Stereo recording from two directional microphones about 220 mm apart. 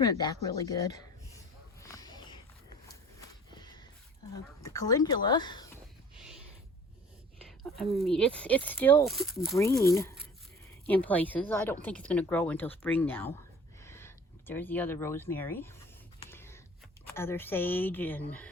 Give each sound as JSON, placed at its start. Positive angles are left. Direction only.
{"t": 0.0, "sound": "speech", "side_deg": 15}
{"t": 1.8, "sound": "a sound", "side_deg": 15}
{"t": 4.6, "sound": "speech", "side_deg": 15}
{"t": 7.9, "sound": "speech", "side_deg": 0}
{"t": 9.8, "sound": "speech", "side_deg": 15}
{"t": 16.3, "sound": "a sound", "side_deg": 10}
{"t": 17.1, "sound": "speech", "side_deg": 10}